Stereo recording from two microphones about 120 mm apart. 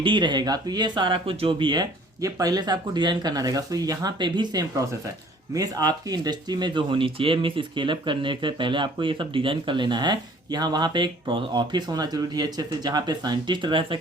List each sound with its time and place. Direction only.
0.0 s speech: 40° right (ahead or behind)